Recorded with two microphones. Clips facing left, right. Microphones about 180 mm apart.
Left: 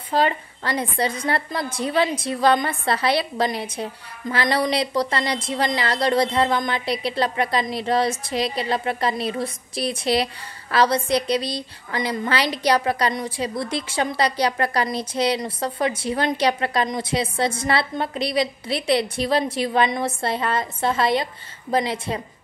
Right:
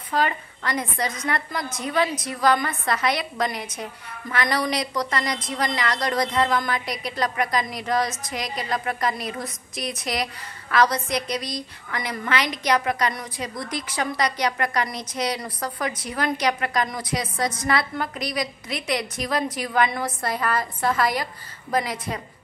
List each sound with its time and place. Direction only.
0.1 s a woman's voice: 30° left (ahead or behind)